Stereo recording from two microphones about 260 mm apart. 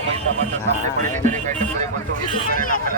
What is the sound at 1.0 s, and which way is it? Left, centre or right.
Music, right.